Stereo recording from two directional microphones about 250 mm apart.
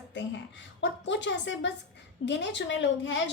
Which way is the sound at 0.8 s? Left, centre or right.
Left.